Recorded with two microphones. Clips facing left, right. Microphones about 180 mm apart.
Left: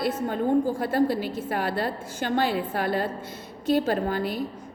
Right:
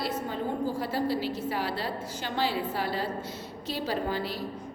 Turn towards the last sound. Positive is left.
turn(degrees=50)  # may be behind; listen again after turning